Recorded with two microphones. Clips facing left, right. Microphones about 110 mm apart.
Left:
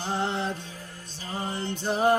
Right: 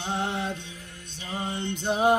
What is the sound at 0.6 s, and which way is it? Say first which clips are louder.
Music: left 2 dB; 35° left (ahead or behind).